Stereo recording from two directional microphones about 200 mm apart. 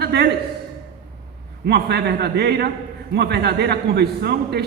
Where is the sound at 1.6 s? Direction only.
55° right (ahead or behind).